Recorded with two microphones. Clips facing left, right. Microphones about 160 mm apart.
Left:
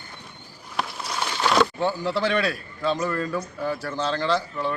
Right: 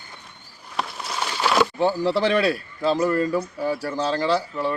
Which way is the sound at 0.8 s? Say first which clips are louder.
Even; centre (ahead or behind).